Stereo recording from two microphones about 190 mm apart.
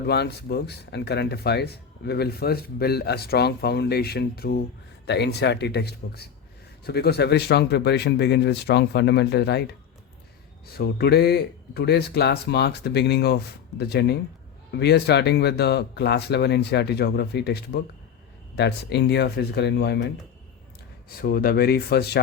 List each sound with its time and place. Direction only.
0.1 s speech: 60° left (ahead or behind)
10.7 s speech: 55° left (ahead or behind)
21.2 s speech: 50° left (ahead or behind)